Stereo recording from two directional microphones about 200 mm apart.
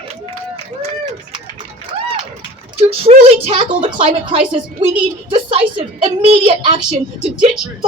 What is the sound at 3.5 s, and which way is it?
A woman's voice, 25° right (ahead or behind).